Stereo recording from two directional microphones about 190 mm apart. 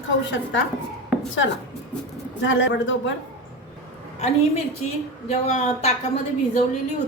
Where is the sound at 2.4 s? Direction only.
80° left.